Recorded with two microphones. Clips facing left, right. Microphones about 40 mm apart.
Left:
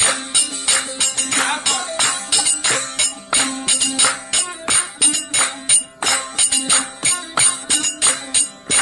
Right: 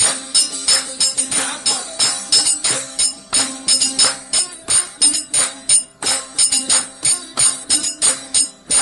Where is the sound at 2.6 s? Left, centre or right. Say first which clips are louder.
Left 4 dB; left.